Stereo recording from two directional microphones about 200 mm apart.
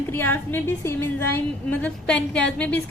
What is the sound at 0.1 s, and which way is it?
A woman's voice, 10° left (ahead or behind).